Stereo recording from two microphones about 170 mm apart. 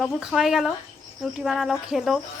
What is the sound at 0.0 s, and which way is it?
A woman's voice, centre (ahead or behind).